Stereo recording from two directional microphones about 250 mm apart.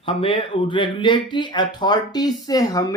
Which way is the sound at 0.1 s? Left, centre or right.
Left.